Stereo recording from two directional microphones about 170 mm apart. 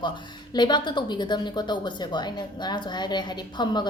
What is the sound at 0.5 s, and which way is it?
Speech, 25° left (ahead or behind).